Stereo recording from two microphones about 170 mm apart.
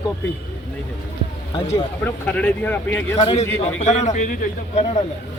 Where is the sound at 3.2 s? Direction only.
40° left (ahead or behind).